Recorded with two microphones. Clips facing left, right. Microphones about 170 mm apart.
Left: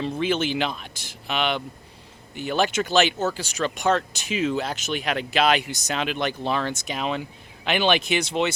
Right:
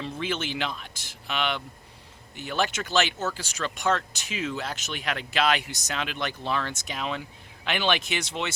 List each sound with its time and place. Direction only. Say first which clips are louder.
0.0 s speech: left 7 dB; 20° left (ahead or behind)
3.2 s speech: left 5 dB; 30° left (ahead or behind)
3.4 s speech: left 2 dB; 15° left (ahead or behind)